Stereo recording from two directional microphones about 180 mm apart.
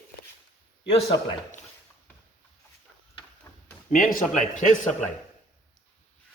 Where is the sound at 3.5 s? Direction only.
15° left (ahead or behind).